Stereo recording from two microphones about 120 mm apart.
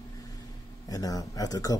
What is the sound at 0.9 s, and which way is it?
Speech, 30° left (ahead or behind).